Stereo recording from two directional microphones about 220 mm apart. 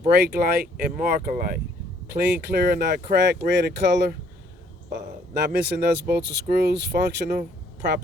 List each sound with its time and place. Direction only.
0.1 s speech: 45° right (ahead or behind)
5.3 s speech: 50° right (ahead or behind)